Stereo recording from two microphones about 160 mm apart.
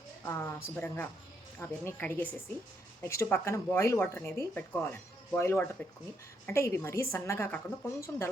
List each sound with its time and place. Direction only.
0.3 s speech: 10° left (ahead or behind)